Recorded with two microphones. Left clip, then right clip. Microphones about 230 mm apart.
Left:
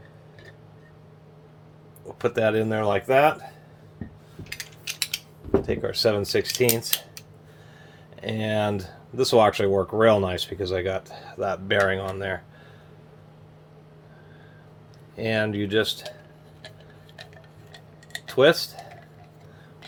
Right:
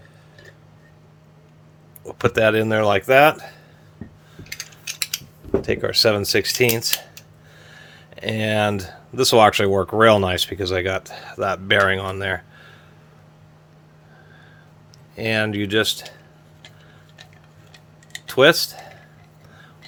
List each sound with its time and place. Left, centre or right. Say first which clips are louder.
2.0 s speech: right 5 dB; right
5.6 s speech: right 9 dB; right
15.1 s speech: right 4 dB; right
18.3 s speech: right 4 dB; right